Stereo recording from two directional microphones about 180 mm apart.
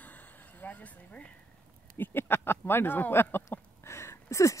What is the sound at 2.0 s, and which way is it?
Speech, 10° left (ahead or behind).